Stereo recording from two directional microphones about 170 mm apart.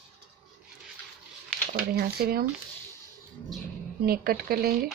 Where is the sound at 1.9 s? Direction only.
65° right (ahead or behind).